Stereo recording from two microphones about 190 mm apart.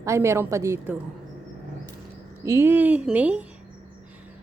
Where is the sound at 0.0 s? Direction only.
15° right (ahead or behind).